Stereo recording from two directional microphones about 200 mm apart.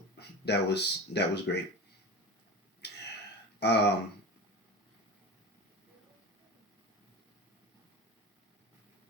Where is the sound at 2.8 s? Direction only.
55° left (ahead or behind).